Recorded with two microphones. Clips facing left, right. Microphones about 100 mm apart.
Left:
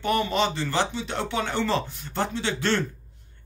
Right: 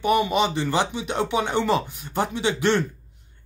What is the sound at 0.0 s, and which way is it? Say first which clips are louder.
Speech: right 3 dB; 15° right (ahead or behind).